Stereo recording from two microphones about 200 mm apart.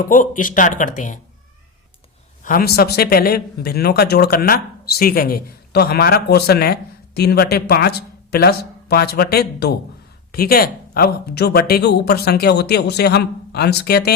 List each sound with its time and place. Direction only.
0.0 s speech: 40° left (ahead or behind)
2.4 s a woman's voice: 45° left (ahead or behind)